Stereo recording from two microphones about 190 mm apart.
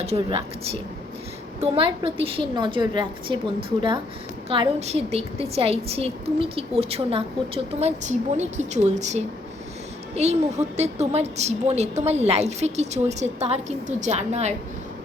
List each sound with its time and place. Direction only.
0.0 s a woman's voice: 30° right (ahead or behind)